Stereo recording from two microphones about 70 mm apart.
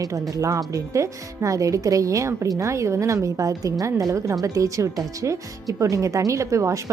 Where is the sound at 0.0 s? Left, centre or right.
Right.